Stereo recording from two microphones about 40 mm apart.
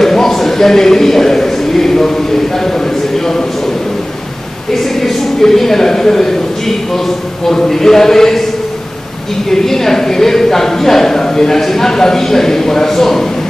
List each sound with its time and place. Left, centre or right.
0.0 s a sound: centre
4.8 s speech: centre
9.5 s speech: centre